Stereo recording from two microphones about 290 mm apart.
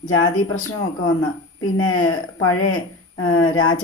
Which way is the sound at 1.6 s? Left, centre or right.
Left.